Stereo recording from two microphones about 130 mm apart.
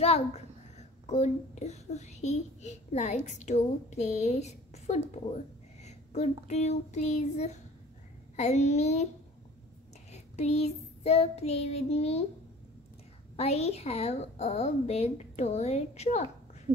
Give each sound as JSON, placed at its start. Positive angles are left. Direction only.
{"t": 0.0, "sound": "a child's voice", "side_deg": 55}
{"t": 10.1, "sound": "child singing", "side_deg": 55}
{"t": 13.4, "sound": "a woman's voice", "side_deg": 55}